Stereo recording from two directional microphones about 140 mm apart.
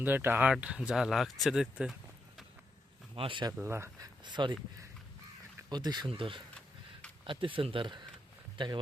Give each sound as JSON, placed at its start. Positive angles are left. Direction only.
{"t": 0.0, "sound": "speech", "side_deg": -15}
{"t": 3.2, "sound": "speech", "side_deg": -35}
{"t": 3.6, "sound": "speech", "side_deg": -20}
{"t": 4.2, "sound": "speech", "side_deg": -35}
{"t": 5.6, "sound": "speech", "side_deg": -30}